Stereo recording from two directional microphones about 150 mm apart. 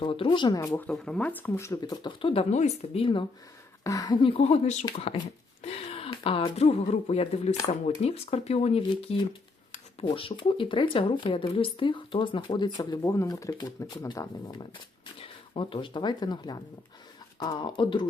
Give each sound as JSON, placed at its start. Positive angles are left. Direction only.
{"t": 0.0, "sound": "speech", "side_deg": 35}
{"t": 0.8, "sound": "speech", "side_deg": 5}
{"t": 3.8, "sound": "speech", "side_deg": 25}
{"t": 5.1, "sound": "speech", "side_deg": 35}